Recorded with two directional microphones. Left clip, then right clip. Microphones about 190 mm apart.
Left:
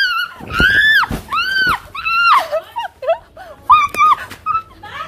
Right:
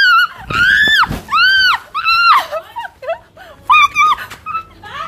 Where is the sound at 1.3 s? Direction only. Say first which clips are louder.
Right 6 dB; 70° left (ahead or behind).